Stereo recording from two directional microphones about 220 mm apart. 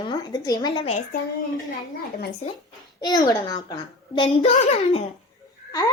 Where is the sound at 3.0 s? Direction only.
20° left (ahead or behind).